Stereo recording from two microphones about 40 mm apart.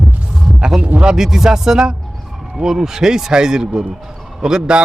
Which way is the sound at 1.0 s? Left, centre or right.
Centre.